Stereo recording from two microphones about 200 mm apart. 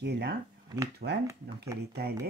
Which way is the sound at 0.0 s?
55° right (ahead or behind).